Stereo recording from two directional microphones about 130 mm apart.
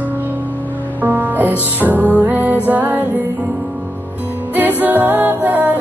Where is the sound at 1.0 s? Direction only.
15° right (ahead or behind).